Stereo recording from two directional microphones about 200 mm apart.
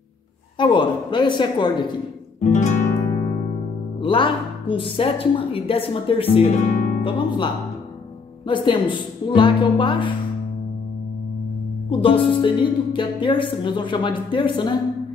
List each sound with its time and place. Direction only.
0.6 s a woman's voice: 25° left (ahead or behind)
2.4 s music: 35° left (ahead or behind)
4.0 s a woman's voice: 25° left (ahead or behind)
11.9 s a woman's voice: 25° left (ahead or behind)